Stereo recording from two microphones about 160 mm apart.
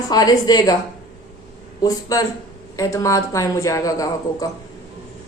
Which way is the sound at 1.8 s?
20° left (ahead or behind).